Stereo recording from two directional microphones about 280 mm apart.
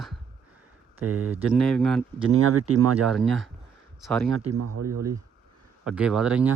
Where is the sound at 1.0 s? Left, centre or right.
Right.